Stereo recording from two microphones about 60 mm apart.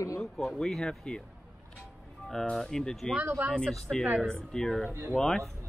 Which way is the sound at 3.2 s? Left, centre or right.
Right.